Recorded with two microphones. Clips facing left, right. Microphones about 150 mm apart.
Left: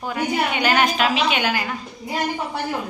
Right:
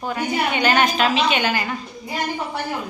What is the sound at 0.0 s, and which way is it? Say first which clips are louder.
A woman's voice: even; 5° left (ahead or behind).